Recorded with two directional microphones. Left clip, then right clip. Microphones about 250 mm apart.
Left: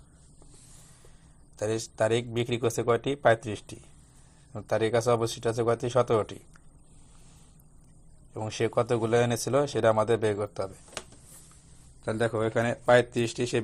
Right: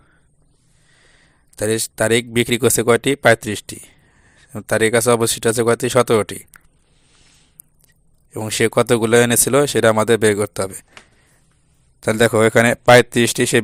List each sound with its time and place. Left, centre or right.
1.5 s speech: right
5.4 s speech: right
5.8 s speech: right
8.3 s speech: right
11.9 s speech: right